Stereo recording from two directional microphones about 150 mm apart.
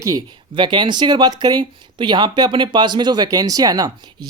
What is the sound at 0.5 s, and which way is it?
Speech, 30° right (ahead or behind).